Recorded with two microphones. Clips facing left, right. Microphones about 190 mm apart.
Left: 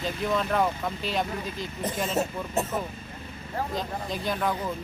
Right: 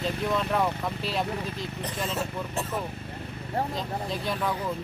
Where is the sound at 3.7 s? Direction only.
Centre (ahead or behind).